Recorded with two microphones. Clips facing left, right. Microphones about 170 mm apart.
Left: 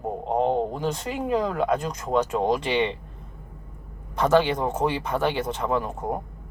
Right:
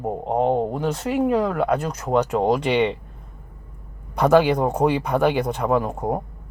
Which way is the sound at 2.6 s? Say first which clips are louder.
Right 4 dB; 65° right (ahead or behind).